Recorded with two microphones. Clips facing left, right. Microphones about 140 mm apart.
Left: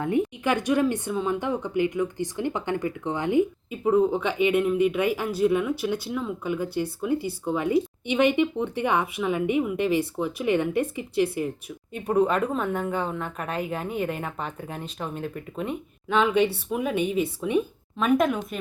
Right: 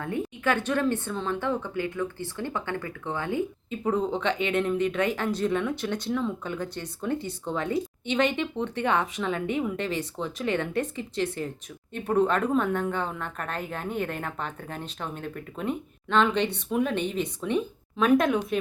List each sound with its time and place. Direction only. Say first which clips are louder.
0.0 s a woman's voice: left 4 dB; 15° left (ahead or behind)